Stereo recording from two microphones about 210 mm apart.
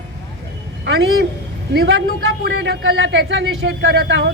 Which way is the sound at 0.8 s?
60° right (ahead or behind).